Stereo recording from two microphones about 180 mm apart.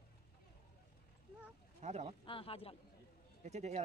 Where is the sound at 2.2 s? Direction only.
30° left (ahead or behind).